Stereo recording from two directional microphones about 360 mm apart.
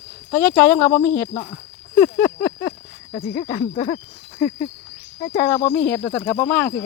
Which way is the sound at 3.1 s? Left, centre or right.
Centre.